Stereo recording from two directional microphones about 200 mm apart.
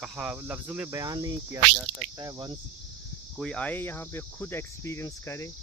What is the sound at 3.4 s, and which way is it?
Cricket, 5° left (ahead or behind).